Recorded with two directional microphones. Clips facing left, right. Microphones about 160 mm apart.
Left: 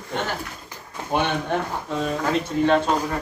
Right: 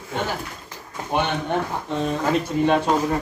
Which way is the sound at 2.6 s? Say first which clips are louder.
Even; 10° right (ahead or behind).